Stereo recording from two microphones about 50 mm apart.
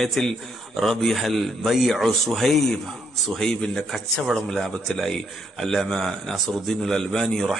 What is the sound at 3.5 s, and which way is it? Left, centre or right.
Speech, centre.